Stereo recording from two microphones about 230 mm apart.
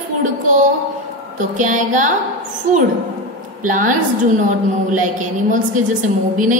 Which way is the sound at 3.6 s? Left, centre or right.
Right.